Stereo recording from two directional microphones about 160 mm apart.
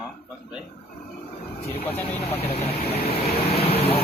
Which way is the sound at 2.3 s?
40° left (ahead or behind).